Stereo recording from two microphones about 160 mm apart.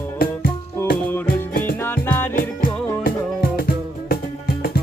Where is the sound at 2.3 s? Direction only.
60° left (ahead or behind).